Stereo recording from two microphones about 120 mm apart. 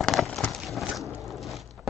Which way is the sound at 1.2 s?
Centre (ahead or behind).